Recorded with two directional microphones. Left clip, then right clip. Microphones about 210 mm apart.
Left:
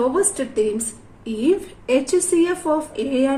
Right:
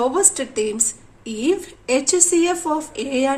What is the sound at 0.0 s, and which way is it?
A woman's voice, 35° right (ahead or behind).